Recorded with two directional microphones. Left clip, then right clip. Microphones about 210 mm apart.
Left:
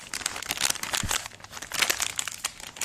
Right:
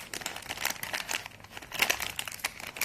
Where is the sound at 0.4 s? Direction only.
35° left (ahead or behind).